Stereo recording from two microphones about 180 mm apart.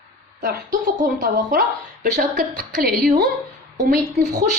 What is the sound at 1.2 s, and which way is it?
A woman's voice, 55° right (ahead or behind).